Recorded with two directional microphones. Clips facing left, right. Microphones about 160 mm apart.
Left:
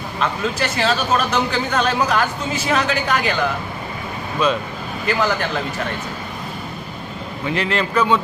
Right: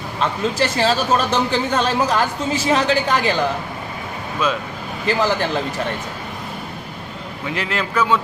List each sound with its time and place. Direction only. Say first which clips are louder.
0.2 s speech: right 2 dB; 30° right (ahead or behind)
4.4 s speech: left 2 dB; 5° right (ahead or behind)
5.0 s speech: right 1 dB; 30° right (ahead or behind)
7.5 s a man's voice: left 3 dB; 5° right (ahead or behind)